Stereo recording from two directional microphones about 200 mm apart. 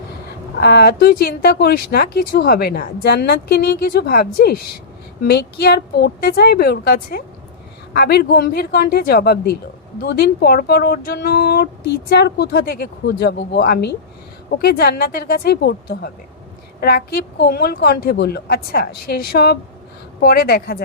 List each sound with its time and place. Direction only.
0.6 s a woman's voice: 55° left (ahead or behind)